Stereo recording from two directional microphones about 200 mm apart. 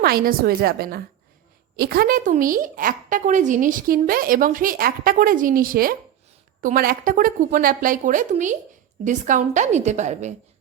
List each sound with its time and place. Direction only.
0.0 s a woman's voice: 50° right (ahead or behind)